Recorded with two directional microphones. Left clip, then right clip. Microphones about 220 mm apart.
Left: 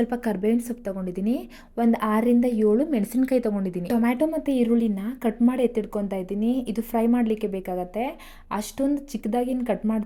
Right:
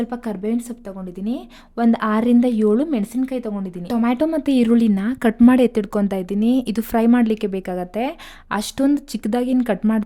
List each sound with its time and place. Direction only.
0.0 s a woman's voice: 5° right (ahead or behind)
1.7 s speech: 15° right (ahead or behind)
2.9 s a woman's voice: 5° right (ahead or behind); by 10.0 s 25° right (ahead or behind)